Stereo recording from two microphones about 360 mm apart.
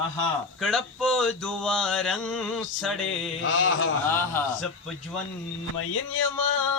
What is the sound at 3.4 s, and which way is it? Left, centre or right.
Speech, left.